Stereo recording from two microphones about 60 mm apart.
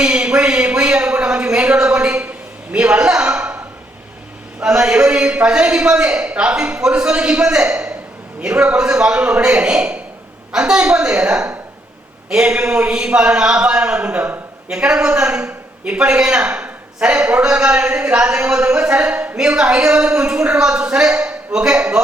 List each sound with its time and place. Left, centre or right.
0.0 s a sound: centre
4.6 s a man's voice: centre
19.4 s a man's voice: centre